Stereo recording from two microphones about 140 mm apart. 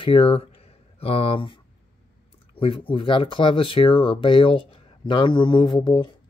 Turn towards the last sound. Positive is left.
turn(degrees=35)  # may be behind; listen again after turning